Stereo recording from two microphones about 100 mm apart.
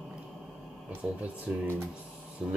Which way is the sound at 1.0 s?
15° right (ahead or behind).